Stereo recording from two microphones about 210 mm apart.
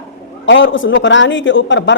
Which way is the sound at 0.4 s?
65° left (ahead or behind).